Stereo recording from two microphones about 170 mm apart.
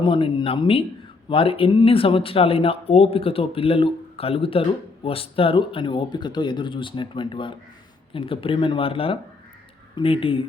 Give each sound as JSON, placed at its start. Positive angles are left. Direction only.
{"t": 0.0, "sound": "speech", "side_deg": 30}